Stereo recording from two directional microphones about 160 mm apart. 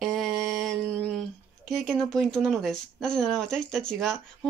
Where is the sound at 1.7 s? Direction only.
5° left (ahead or behind).